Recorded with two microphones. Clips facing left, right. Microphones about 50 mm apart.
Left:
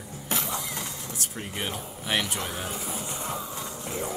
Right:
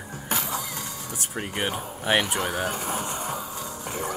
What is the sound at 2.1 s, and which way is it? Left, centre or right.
Speech, right.